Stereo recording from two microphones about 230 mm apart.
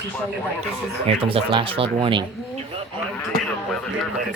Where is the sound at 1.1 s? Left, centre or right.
Right.